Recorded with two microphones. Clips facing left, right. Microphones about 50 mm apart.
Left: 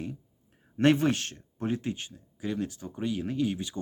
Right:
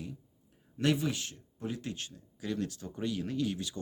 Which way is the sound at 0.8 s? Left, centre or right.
Left.